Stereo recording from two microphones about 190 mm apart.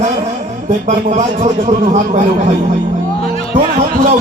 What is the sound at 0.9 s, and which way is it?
Speech, 45° right (ahead or behind).